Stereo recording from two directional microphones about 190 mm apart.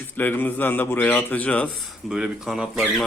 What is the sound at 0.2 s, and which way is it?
A man's voice, 10° left (ahead or behind).